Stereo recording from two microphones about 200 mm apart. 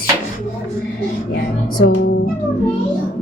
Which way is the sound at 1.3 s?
55° left (ahead or behind).